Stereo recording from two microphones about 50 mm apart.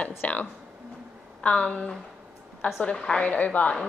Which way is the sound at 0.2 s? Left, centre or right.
Left.